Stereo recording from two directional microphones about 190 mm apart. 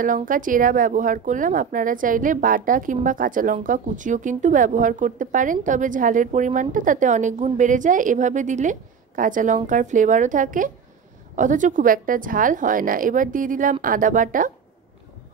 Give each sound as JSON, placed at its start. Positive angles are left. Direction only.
{"t": 0.0, "sound": "a woman's voice", "side_deg": -45}